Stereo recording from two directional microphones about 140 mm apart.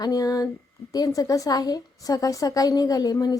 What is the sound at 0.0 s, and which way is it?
A woman's voice, 25° left (ahead or behind).